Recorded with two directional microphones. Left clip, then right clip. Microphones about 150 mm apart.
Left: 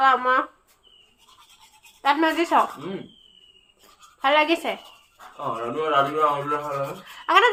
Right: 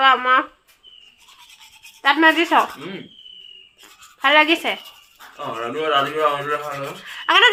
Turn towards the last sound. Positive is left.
turn(degrees=-10)  # may be behind; listen again after turning